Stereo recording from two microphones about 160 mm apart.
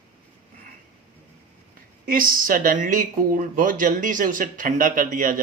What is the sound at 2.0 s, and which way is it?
Speech, 60° right (ahead or behind).